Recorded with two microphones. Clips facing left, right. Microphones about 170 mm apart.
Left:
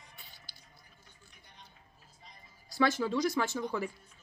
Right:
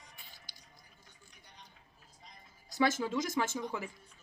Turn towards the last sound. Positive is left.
turn(degrees=-15)  # may be behind; listen again after turning